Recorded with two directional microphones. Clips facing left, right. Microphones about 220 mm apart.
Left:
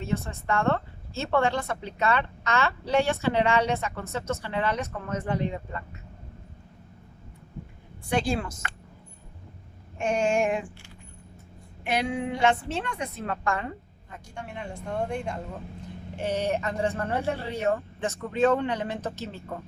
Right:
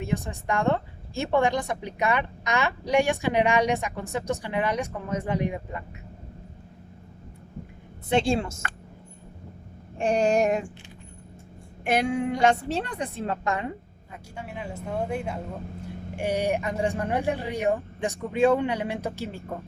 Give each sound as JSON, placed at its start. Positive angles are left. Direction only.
{"t": 0.0, "sound": "a woman's voice", "side_deg": -15}
{"t": 8.1, "sound": "a woman's voice", "side_deg": -25}
{"t": 10.0, "sound": "a woman's voice", "side_deg": -35}
{"t": 11.9, "sound": "a woman's voice", "side_deg": -50}
{"t": 14.1, "sound": "a woman's voice", "side_deg": -5}